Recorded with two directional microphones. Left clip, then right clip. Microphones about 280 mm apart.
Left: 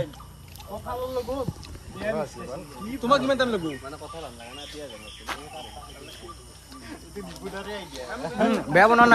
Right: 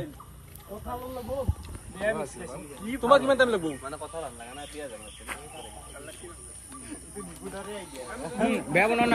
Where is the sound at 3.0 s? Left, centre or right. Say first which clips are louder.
Right 1 dB; right.